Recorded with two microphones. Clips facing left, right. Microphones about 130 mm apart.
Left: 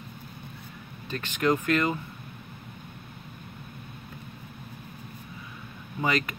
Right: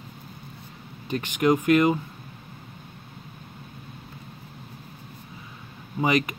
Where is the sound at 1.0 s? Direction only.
15° right (ahead or behind).